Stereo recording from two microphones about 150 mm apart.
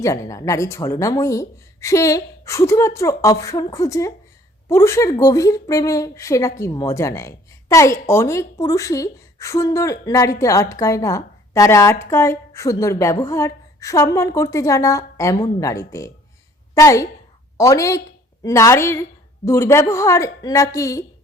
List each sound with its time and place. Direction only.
0.0 s a woman's voice: 20° left (ahead or behind)